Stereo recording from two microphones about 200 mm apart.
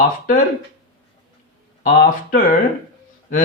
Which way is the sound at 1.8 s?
45° left (ahead or behind).